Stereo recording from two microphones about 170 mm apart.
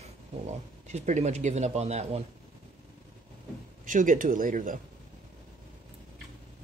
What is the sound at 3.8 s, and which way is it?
Speech, 50° right (ahead or behind).